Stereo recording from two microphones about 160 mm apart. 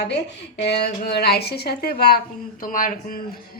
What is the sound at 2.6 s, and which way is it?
Speech, 60° left (ahead or behind).